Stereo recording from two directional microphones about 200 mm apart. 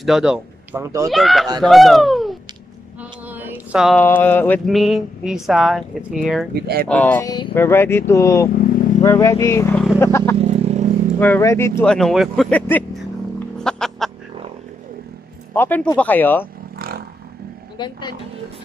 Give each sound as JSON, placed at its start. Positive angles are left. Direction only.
{"t": 0.0, "sound": "speech", "side_deg": -5}
{"t": 3.3, "sound": "a sound", "side_deg": -10}
{"t": 4.0, "sound": "speech", "side_deg": 10}
{"t": 6.5, "sound": "speech", "side_deg": -50}
{"t": 6.9, "sound": "speech", "side_deg": 10}
{"t": 7.2, "sound": "speech", "side_deg": 20}
{"t": 7.5, "sound": "speech", "side_deg": 10}
{"t": 10.3, "sound": "vehicle", "side_deg": -30}
{"t": 11.1, "sound": "speech", "side_deg": 10}
{"t": 13.6, "sound": "music", "side_deg": 5}
{"t": 15.5, "sound": "speech", "side_deg": 10}
{"t": 16.7, "sound": "a sound", "side_deg": -50}
{"t": 17.7, "sound": "speech", "side_deg": 20}